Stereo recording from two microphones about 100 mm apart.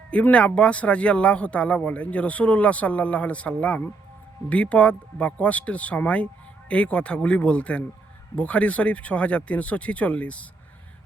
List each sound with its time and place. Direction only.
0.1 s speech: 10° left (ahead or behind)